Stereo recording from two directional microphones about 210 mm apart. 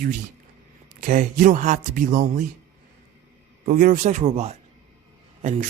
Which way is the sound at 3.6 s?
40° right (ahead or behind).